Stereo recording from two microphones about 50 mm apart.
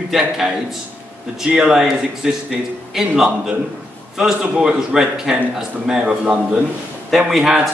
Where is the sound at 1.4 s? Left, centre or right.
Centre.